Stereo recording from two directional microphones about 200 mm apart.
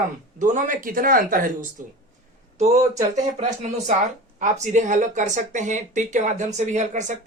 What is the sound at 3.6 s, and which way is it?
Speech, 35° right (ahead or behind).